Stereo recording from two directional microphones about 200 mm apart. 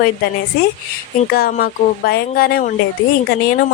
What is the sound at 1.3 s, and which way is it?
Speech, 50° left (ahead or behind).